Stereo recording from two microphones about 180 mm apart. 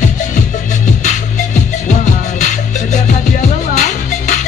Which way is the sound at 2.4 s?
45° left (ahead or behind).